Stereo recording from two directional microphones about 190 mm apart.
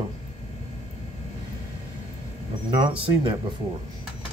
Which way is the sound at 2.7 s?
25° right (ahead or behind).